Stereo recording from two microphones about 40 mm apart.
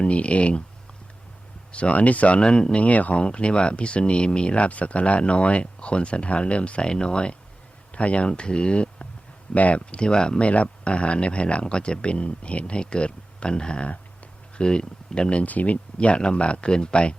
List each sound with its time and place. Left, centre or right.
0.0 s speech: left
1.7 s speech: left
2.4 s speech: left
2.8 s speech: left
15.4 s speech: left